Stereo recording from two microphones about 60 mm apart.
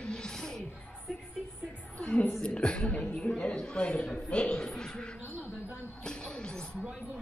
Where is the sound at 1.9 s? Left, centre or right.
Left.